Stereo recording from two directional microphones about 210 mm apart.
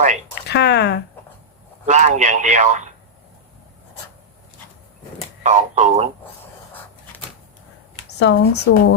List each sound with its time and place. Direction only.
0.4 s speech: 55° left (ahead or behind)
1.9 s speech: 35° right (ahead or behind)
5.4 s speech: 35° right (ahead or behind)
8.2 s speech: 55° left (ahead or behind)